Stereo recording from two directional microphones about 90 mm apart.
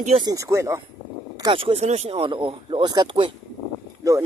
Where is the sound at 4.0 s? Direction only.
35° right (ahead or behind).